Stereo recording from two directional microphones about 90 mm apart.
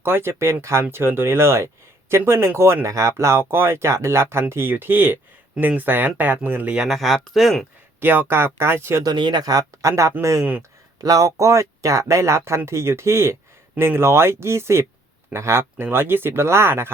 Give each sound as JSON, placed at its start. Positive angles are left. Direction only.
{"t": 0.0, "sound": "speech", "side_deg": -25}
{"t": 6.8, "sound": "speech", "side_deg": 0}
{"t": 8.0, "sound": "speech", "side_deg": -20}
{"t": 9.0, "sound": "speech", "side_deg": -55}